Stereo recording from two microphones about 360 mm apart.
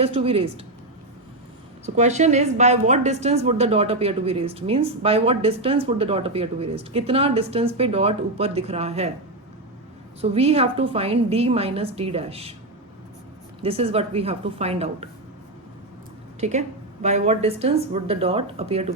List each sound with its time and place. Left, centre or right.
0.0 s a woman's voice: centre
2.0 s a woman's voice: centre
10.2 s a woman's voice: centre
13.6 s a woman's voice: centre
16.4 s a woman's voice: centre